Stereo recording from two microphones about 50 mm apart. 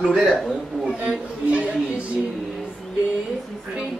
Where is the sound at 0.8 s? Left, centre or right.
Right.